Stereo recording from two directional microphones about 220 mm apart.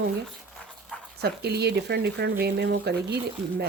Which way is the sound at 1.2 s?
45° right (ahead or behind).